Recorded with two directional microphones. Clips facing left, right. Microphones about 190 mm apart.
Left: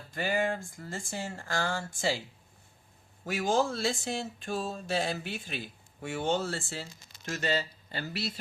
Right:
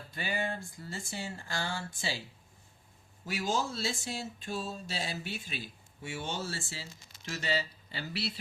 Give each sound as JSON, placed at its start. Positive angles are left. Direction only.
{"t": 0.1, "sound": "speech", "side_deg": 45}
{"t": 3.2, "sound": "speech", "side_deg": 55}